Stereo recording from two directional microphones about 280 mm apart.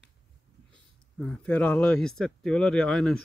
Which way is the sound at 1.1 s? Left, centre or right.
Centre.